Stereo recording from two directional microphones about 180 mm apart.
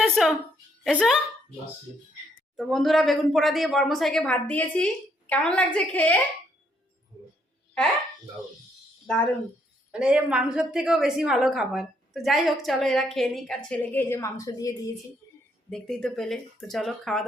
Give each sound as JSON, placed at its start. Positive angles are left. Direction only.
{"t": 0.0, "sound": "a sound", "side_deg": 0}
{"t": 0.9, "sound": "a woman's voice", "side_deg": 5}
{"t": 2.6, "sound": "a woman's voice", "side_deg": 0}
{"t": 9.1, "sound": "a woman's voice", "side_deg": 5}
{"t": 9.9, "sound": "a woman's voice", "side_deg": -5}
{"t": 15.2, "sound": "a sound", "side_deg": 20}
{"t": 15.7, "sound": "a woman's voice", "side_deg": 5}